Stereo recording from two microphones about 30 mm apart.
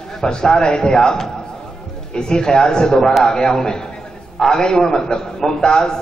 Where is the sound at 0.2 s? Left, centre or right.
Left.